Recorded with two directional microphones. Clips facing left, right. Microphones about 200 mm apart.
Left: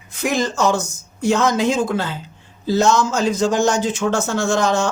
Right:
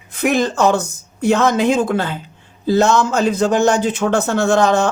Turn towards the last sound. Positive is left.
turn(degrees=-60)  # may be behind; listen again after turning